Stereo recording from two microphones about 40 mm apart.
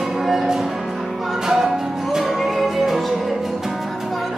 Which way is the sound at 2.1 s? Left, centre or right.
Centre.